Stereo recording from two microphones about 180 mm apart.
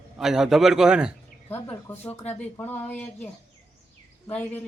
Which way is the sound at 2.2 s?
35° left (ahead or behind).